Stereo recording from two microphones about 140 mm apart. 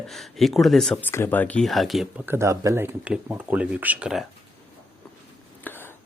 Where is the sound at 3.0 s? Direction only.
10° right (ahead or behind).